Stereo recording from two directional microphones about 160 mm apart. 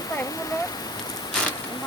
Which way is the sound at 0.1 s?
20° left (ahead or behind).